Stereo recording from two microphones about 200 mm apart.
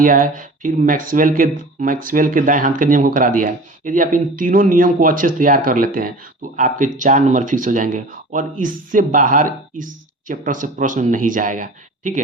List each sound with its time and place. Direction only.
0.0 s speech: 40° right (ahead or behind)